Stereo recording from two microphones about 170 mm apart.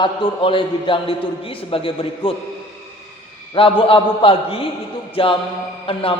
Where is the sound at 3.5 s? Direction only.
30° left (ahead or behind).